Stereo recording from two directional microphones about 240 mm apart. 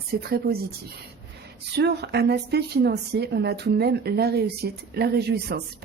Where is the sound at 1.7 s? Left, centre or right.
Right.